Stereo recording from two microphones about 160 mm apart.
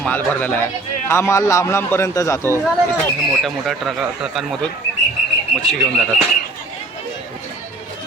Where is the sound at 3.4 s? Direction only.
Centre (ahead or behind).